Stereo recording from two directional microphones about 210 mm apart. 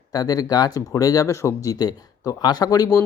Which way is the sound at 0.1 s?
15° left (ahead or behind).